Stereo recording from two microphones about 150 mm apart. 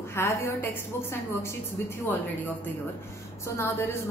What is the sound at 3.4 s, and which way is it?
Speech, 15° left (ahead or behind).